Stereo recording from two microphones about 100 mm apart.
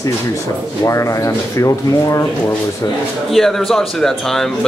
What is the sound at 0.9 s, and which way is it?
Speech, 30° left (ahead or behind).